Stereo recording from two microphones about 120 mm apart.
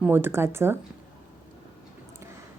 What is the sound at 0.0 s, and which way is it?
Speech, 20° right (ahead or behind).